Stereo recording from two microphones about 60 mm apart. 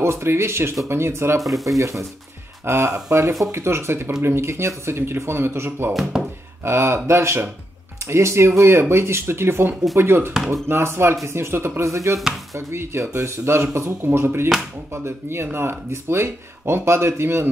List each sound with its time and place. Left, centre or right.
0.0 s speech: right
1.4 s speech: centre
1.8 s speech: right
11.8 s speech: right
12.5 s speech: right
14.0 s speech: right